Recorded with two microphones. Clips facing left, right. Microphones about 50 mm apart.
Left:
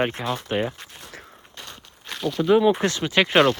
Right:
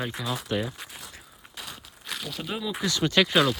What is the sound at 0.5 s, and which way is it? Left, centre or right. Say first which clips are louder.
Speech: left 4 dB; left.